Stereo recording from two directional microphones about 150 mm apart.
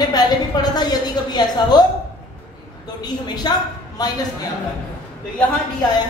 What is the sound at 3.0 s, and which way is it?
A woman's voice, 30° left (ahead or behind).